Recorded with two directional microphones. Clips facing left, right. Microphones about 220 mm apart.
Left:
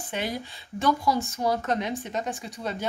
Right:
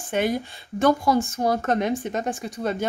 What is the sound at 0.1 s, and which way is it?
Speech, 50° right (ahead or behind).